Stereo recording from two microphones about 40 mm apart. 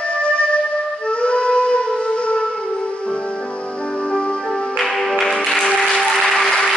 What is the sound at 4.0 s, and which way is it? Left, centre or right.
Music, left.